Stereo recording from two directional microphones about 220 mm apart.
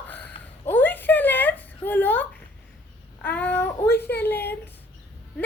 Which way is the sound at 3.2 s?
5° left (ahead or behind).